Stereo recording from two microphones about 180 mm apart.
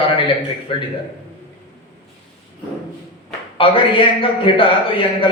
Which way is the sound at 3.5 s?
30° left (ahead or behind).